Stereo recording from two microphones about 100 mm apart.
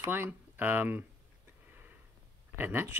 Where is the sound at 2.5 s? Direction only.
20° right (ahead or behind).